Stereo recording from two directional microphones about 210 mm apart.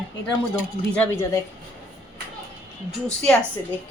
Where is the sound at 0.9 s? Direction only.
10° left (ahead or behind).